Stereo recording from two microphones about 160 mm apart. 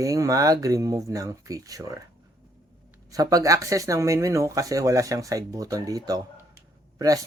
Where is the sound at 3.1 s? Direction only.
20° right (ahead or behind).